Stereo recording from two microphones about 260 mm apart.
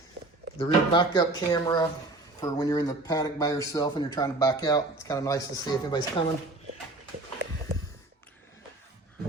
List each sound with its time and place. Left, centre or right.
0.6 s speech: centre